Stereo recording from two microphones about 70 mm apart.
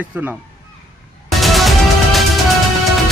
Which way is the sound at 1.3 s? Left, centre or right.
Centre.